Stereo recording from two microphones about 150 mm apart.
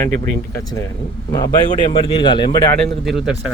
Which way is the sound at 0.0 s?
20° left (ahead or behind).